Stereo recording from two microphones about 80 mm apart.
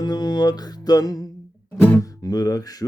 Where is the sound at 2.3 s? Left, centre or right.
Left.